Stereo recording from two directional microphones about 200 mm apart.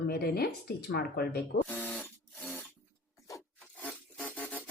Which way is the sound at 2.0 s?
Centre (ahead or behind).